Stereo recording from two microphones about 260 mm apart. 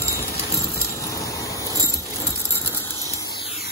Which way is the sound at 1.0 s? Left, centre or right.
Centre.